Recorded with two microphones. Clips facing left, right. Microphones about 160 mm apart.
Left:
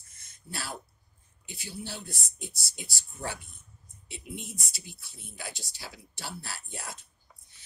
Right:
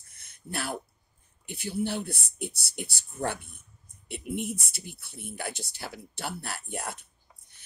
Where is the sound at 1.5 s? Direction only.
60° right (ahead or behind).